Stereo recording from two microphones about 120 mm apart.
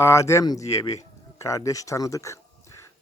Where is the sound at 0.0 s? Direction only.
20° left (ahead or behind).